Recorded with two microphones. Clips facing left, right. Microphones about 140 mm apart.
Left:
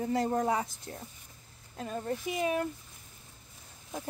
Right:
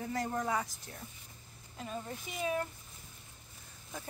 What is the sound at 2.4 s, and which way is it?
Speech, 70° left (ahead or behind).